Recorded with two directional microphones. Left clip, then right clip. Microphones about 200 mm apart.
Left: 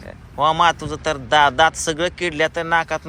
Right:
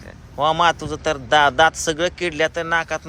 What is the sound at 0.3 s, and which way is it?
A man's voice, 15° right (ahead or behind).